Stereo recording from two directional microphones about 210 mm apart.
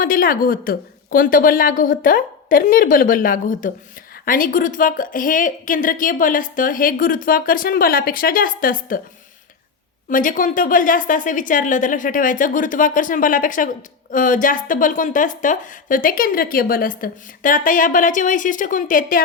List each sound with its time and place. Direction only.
0.0 s a woman's voice: 40° left (ahead or behind)
10.1 s a woman's voice: 40° left (ahead or behind)